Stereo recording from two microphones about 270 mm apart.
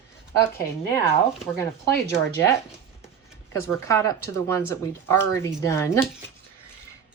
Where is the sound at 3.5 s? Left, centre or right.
Centre.